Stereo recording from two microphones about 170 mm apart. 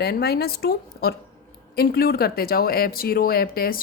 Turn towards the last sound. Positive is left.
turn(degrees=60)  # may be behind; listen again after turning